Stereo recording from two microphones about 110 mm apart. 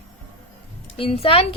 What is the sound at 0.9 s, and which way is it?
Speech, 60° left (ahead or behind).